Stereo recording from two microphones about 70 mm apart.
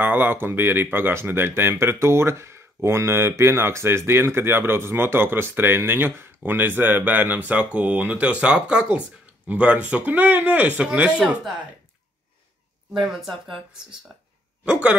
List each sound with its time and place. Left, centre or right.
0.0 s speech: right
13.0 s speech: centre
14.6 s speech: centre